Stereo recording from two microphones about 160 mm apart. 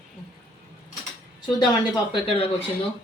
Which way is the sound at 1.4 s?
30° left (ahead or behind).